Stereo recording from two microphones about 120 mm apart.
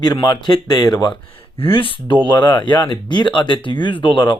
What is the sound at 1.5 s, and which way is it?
Speech, 50° left (ahead or behind).